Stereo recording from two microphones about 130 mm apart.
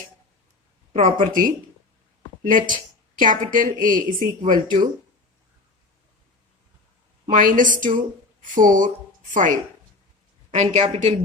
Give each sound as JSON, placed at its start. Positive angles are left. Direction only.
{"t": 0.9, "sound": "speech", "side_deg": -85}
{"t": 7.3, "sound": "a woman's voice", "side_deg": -90}
{"t": 10.5, "sound": "speech", "side_deg": -60}